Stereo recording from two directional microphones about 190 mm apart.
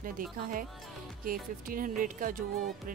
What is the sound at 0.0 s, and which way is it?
Speech, 45° right (ahead or behind).